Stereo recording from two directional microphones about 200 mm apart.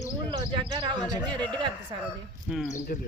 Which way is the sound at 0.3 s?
25° right (ahead or behind).